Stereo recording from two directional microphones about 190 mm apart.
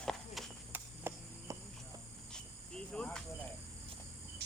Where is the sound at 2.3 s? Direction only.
5° left (ahead or behind).